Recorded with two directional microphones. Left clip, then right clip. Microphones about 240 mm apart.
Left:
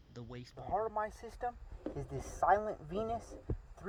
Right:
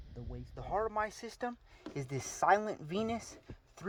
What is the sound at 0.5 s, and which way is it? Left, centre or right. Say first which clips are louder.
Speech: right 1 dB; right.